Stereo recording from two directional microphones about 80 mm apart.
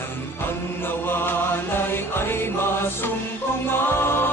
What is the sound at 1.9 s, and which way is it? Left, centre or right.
Music, left.